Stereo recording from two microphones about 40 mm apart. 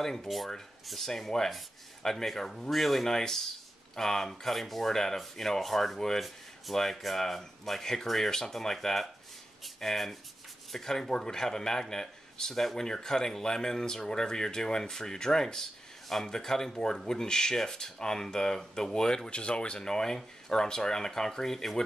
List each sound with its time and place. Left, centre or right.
0.0 s speech: centre